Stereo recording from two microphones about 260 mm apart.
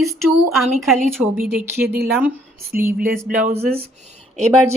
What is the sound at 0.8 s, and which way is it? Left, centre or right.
A woman's voice, centre.